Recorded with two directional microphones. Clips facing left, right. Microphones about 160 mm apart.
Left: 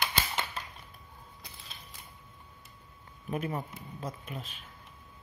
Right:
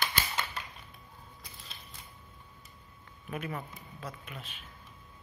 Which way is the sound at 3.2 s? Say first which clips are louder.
Left 4 dB; 35° left (ahead or behind).